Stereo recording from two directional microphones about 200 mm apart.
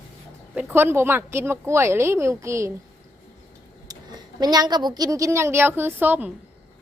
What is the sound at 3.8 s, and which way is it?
A woman's voice, 20° right (ahead or behind).